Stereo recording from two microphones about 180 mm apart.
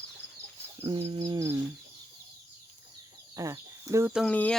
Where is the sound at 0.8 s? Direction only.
30° right (ahead or behind).